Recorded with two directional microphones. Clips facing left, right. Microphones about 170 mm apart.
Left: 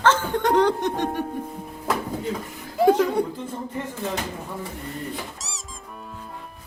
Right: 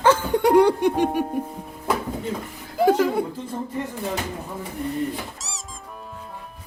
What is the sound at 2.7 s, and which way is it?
Speech, centre (ahead or behind).